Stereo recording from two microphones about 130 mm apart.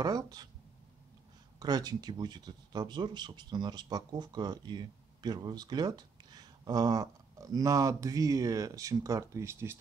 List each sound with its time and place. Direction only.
0.0 s speech: 30° right (ahead or behind)
1.6 s speech: 30° right (ahead or behind)